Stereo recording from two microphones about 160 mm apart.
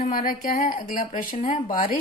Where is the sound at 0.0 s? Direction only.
60° left (ahead or behind).